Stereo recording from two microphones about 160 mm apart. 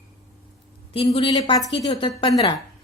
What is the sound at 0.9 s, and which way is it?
Speech, 35° left (ahead or behind).